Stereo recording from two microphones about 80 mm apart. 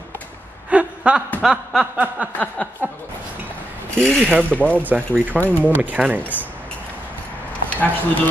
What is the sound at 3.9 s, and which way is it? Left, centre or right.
Speech, centre.